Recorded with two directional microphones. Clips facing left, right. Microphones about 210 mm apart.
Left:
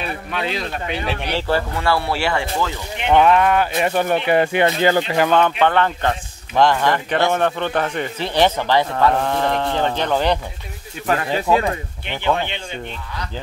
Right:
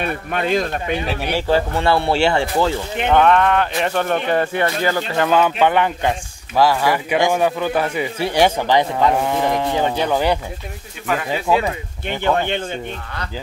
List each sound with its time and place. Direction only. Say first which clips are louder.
0.0 s speech: right 3 dB; 50° right (ahead or behind)
1.0 s speech: right 1 dB; 5° right (ahead or behind)
1.5 s speech: right 3 dB; 25° right (ahead or behind)
3.1 s speech: even; 5° left (ahead or behind)
4.6 s speech: left 3 dB; 20° left (ahead or behind)
5.3 s speech: right 2 dB; 10° right (ahead or behind)
12.1 s speech: right 3 dB; 50° right (ahead or behind)